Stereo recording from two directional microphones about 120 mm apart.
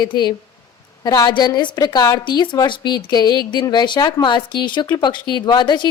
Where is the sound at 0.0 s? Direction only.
40° left (ahead or behind).